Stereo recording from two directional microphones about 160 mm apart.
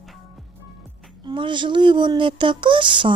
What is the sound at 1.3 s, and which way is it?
Speech, 30° right (ahead or behind).